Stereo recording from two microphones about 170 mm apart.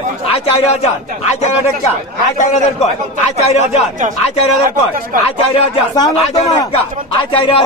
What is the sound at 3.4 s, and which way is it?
Speech, 40° left (ahead or behind).